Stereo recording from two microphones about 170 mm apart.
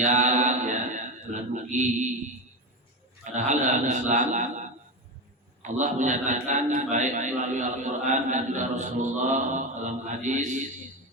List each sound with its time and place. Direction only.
0.0 s mantra: 45° right (ahead or behind)
3.3 s a man's voice: 45° right (ahead or behind)
5.6 s a man's voice: 45° right (ahead or behind)